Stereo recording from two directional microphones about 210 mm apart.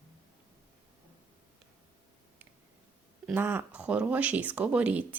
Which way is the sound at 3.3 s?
10° right (ahead or behind).